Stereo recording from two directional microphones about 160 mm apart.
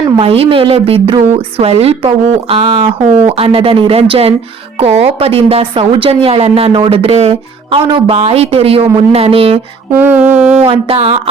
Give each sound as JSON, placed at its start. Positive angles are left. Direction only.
{"t": 0.2, "sound": "speech", "side_deg": -40}
{"t": 9.9, "sound": "mantra", "side_deg": -10}
{"t": 10.6, "sound": "speech", "side_deg": -35}